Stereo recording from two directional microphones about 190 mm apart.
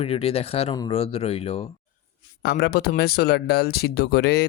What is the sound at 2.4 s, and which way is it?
Speech, 55° left (ahead or behind).